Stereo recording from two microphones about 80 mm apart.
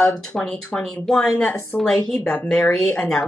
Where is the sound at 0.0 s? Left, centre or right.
Centre.